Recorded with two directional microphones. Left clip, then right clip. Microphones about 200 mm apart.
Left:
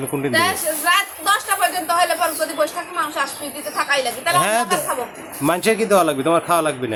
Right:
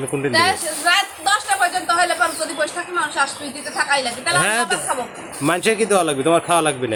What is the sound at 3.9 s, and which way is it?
A woman's voice, 25° left (ahead or behind).